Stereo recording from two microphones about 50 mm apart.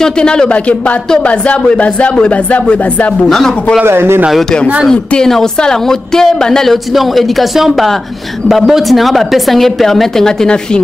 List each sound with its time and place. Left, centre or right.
0.0 s speech: centre
3.3 s speech: centre
3.8 s speech: right
5.3 s a woman's voice: centre